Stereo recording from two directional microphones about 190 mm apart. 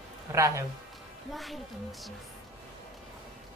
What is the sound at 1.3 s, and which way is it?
Speech, centre (ahead or behind).